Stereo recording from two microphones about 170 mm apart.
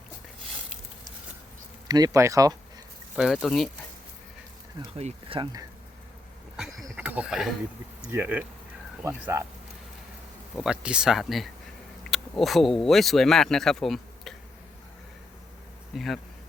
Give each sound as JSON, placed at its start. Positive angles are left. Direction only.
{"t": 1.9, "sound": "speech", "side_deg": -20}
{"t": 3.2, "sound": "speech", "side_deg": 0}
{"t": 4.9, "sound": "speech", "side_deg": -35}
{"t": 6.9, "sound": "a sound", "side_deg": -10}
{"t": 8.1, "sound": "speech", "side_deg": -10}
{"t": 10.5, "sound": "speech", "side_deg": -5}
{"t": 16.0, "sound": "speech", "side_deg": 0}